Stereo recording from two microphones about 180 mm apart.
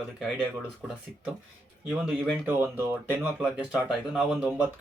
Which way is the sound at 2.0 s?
10° right (ahead or behind).